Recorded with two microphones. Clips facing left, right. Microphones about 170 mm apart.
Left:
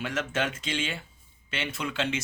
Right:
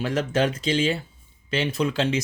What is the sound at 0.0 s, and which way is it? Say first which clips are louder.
Speech: right 7 dB; 35° right (ahead or behind).